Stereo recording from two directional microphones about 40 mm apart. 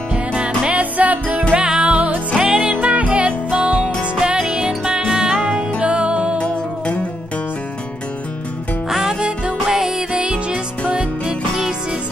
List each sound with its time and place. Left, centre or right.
0.1 s music: right
0.7 s music: right
1.5 s music: right
4.4 s music: centre
9.7 s music: centre